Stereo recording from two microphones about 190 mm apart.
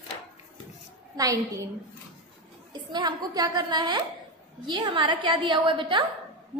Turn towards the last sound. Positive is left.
turn(degrees=-25)  # may be behind; listen again after turning